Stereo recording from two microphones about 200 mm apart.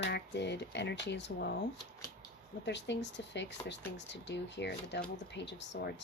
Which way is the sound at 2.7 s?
60° left (ahead or behind).